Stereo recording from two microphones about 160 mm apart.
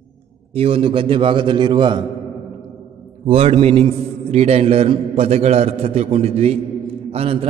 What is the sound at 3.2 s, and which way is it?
A man's voice, 40° right (ahead or behind).